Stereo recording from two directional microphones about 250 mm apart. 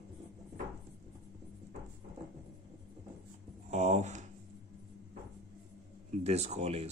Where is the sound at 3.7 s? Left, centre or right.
Right.